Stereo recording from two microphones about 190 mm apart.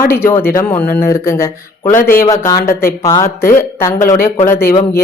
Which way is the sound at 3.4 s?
50° left (ahead or behind).